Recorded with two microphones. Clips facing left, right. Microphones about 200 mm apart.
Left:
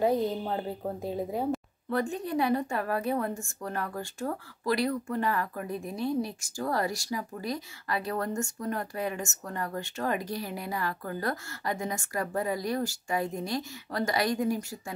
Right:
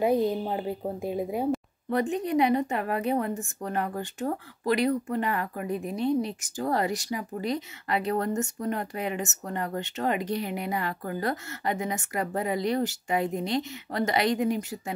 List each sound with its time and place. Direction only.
0.0 s a woman's voice: 15° right (ahead or behind)